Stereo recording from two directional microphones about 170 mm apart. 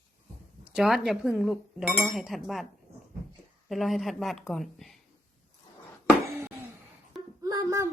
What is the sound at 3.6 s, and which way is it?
Speech, centre (ahead or behind).